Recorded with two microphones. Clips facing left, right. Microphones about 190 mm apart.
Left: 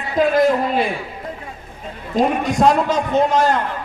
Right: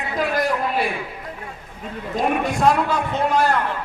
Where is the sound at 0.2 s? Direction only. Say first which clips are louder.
Left 7 dB; 25° left (ahead or behind).